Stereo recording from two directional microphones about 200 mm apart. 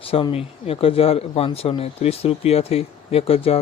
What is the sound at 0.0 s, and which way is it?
Speech, 25° left (ahead or behind).